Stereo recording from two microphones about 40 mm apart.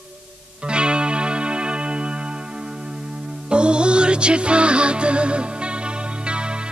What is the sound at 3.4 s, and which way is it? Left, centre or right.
Music, right.